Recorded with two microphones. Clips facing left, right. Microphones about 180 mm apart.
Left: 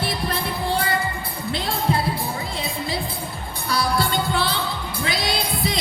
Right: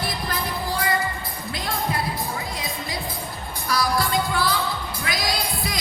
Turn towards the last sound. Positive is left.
turn(degrees=25)  # may be behind; listen again after turning